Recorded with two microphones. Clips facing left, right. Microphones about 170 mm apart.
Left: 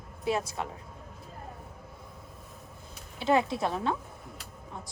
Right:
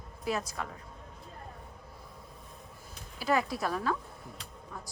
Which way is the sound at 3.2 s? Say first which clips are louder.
Left 4 dB; 25° left (ahead or behind).